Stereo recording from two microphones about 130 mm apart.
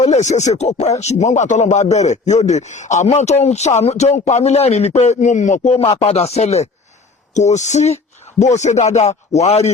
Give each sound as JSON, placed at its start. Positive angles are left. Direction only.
{"t": 0.0, "sound": "a man's voice", "side_deg": 60}